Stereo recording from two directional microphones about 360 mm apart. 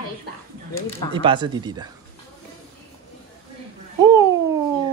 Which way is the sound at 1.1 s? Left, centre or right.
Centre.